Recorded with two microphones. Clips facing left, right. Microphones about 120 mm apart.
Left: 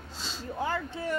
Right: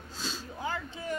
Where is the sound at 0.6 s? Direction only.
65° left (ahead or behind).